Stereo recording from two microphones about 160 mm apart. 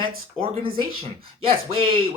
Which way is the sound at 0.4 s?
35° right (ahead or behind).